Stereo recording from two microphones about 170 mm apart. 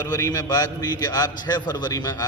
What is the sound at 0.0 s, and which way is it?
A man's voice, 20° left (ahead or behind).